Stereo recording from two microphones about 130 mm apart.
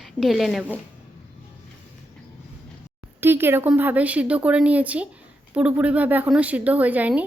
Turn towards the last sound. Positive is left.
turn(degrees=-10)  # may be behind; listen again after turning